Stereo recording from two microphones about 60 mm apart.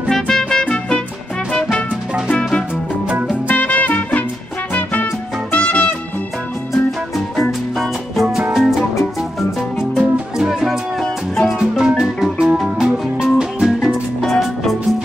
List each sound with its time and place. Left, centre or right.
0.1 s music: centre; by 4.2 s left
5.5 s music: left
7.3 s music: centre
14.2 s music: centre